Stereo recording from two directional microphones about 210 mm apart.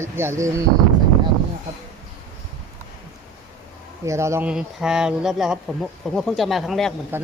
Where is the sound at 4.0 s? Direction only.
15° right (ahead or behind).